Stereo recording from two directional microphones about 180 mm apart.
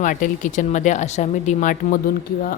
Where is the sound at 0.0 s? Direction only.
45° left (ahead or behind).